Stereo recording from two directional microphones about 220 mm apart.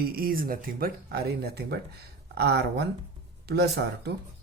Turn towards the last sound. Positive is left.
turn(degrees=-50)  # may be behind; listen again after turning